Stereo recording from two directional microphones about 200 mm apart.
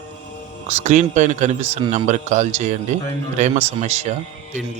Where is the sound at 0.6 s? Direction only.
35° right (ahead or behind).